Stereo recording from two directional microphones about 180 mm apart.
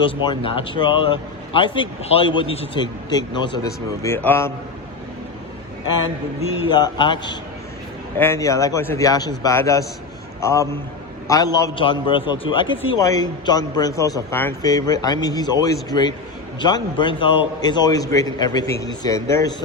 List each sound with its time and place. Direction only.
0.0 s speech: 30° left (ahead or behind); by 4.5 s 10° left (ahead or behind)
6.6 s a man's voice: 25° left (ahead or behind)
11.8 s speech: 30° left (ahead or behind)